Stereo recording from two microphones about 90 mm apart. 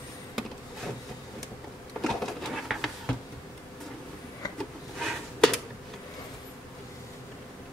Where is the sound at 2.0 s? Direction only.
Centre (ahead or behind).